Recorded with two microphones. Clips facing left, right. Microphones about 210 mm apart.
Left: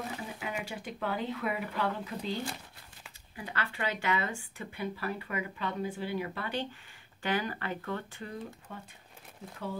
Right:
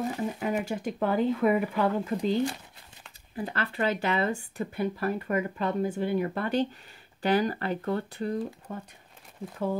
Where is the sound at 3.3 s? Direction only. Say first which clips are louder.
Right 7 dB; 40° right (ahead or behind).